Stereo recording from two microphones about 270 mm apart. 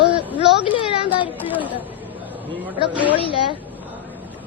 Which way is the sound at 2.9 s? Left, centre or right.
Centre.